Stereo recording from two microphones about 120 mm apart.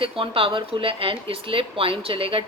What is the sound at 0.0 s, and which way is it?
A woman's voice, 50° right (ahead or behind).